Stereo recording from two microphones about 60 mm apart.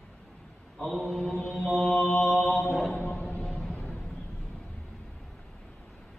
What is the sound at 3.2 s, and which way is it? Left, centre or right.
Music, left.